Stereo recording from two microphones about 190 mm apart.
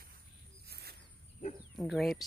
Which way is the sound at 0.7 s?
55° right (ahead or behind).